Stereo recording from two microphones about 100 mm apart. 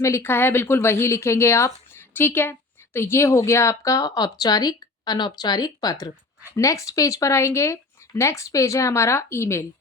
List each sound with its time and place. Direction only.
0.0 s a woman's voice: 25° left (ahead or behind)